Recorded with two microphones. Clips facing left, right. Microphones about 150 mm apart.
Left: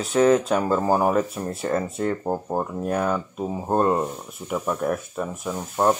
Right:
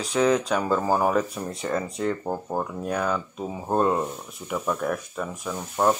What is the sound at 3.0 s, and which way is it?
Speech, 5° left (ahead or behind).